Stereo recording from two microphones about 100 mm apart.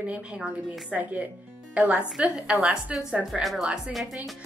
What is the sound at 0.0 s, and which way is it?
A woman's voice, 10° right (ahead or behind).